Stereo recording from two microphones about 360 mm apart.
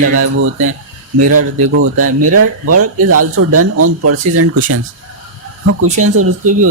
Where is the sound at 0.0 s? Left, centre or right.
Right.